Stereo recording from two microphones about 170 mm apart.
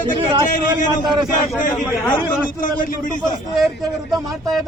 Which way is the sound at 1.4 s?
50° left (ahead or behind).